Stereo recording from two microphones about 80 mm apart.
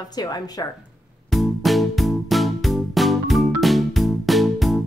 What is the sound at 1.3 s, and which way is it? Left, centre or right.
Music, centre.